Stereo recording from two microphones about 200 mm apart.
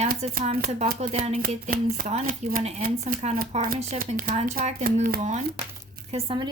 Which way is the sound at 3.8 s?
30° right (ahead or behind).